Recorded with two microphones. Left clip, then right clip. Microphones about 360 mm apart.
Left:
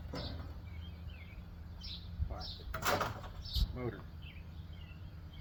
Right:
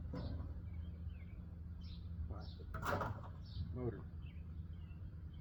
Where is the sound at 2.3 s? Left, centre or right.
Centre.